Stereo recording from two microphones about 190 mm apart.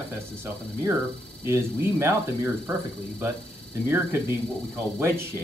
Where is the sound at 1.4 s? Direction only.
15° right (ahead or behind).